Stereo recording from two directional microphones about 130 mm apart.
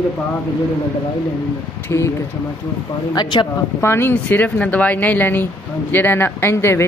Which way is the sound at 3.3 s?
35° left (ahead or behind).